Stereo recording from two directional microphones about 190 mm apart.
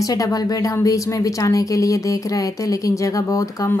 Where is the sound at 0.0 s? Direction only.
20° left (ahead or behind).